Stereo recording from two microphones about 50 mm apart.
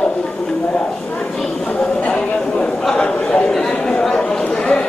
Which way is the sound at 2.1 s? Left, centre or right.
Centre.